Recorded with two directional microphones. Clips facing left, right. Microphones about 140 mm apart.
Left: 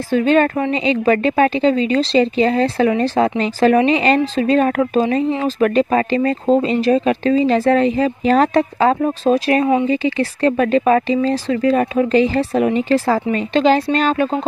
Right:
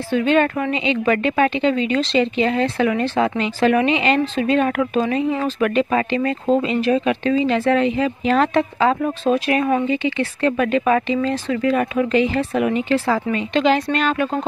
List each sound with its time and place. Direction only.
0.1 s a woman's voice: 40° left (ahead or behind)